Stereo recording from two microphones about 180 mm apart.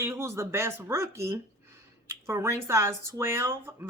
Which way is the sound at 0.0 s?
15° right (ahead or behind).